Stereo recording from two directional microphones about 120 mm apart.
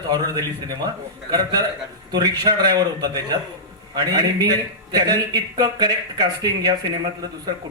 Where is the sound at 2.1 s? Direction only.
35° right (ahead or behind).